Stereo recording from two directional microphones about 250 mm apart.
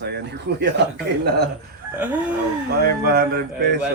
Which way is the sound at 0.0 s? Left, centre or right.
Right.